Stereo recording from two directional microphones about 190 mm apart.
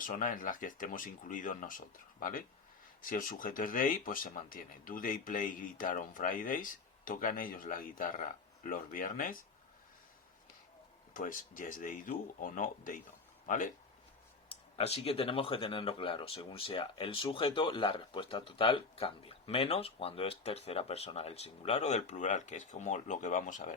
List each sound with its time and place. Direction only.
0.1 s speech: 45° left (ahead or behind)
11.1 s speech: 45° left (ahead or behind)
14.8 s speech: 30° left (ahead or behind)